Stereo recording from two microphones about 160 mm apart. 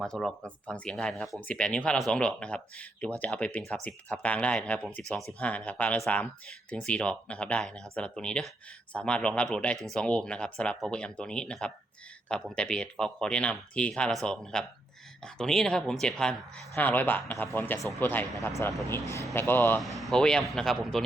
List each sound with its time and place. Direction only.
0.0 s speech: 5° left (ahead or behind)
19.8 s speech: centre (ahead or behind)